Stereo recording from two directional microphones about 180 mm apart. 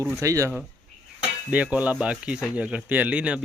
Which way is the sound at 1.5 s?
5° right (ahead or behind).